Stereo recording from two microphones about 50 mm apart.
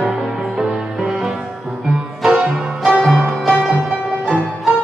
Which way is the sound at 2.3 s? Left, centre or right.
Centre.